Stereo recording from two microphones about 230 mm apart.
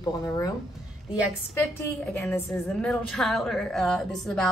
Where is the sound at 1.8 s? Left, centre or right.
Centre.